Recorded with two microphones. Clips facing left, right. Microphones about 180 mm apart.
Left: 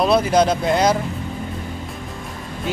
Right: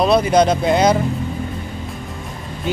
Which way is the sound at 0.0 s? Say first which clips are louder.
Right 2 dB; centre (ahead or behind).